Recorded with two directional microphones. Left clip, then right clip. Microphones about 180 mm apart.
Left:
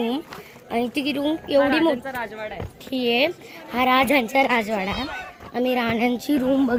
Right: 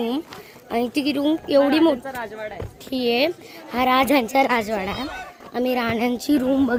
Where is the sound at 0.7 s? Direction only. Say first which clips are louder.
Right 2 dB; 20° right (ahead or behind).